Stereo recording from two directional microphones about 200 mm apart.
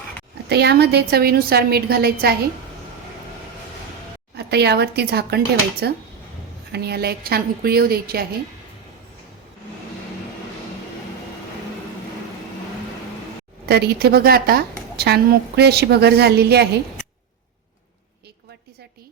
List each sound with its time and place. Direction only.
0.4 s a woman's voice: 55° right (ahead or behind)
4.4 s a woman's voice: 55° right (ahead or behind)
13.7 s a woman's voice: 55° right (ahead or behind)